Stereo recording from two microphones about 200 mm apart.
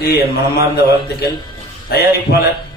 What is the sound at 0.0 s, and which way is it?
A man's voice, 50° left (ahead or behind).